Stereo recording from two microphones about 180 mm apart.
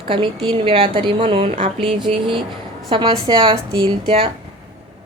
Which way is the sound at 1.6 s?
30° right (ahead or behind).